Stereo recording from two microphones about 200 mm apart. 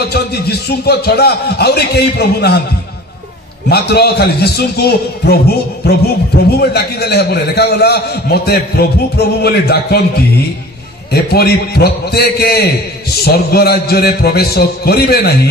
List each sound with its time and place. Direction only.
0.0 s a man's voice: 55° left (ahead or behind)
3.6 s a man's voice: 55° left (ahead or behind)